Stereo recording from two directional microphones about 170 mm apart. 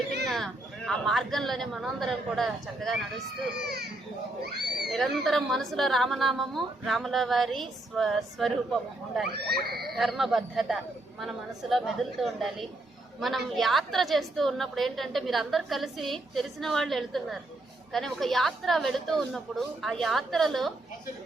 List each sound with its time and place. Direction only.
0.3 s a woman's voice: centre (ahead or behind)
3.6 s speech: 70° right (ahead or behind)
4.9 s a woman's voice: centre (ahead or behind)
9.6 s speech: 65° right (ahead or behind)
9.9 s a woman's voice: centre (ahead or behind)